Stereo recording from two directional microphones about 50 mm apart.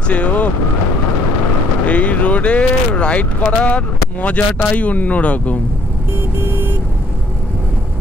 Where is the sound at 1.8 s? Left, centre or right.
Left.